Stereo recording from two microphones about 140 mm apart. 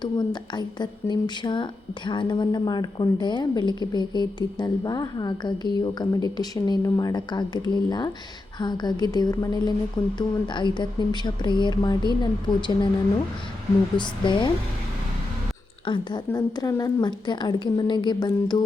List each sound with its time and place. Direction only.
0.0 s a woman's voice: 30° left (ahead or behind)
13.9 s a woman's voice: 35° left (ahead or behind)
15.9 s a woman's voice: 30° left (ahead or behind)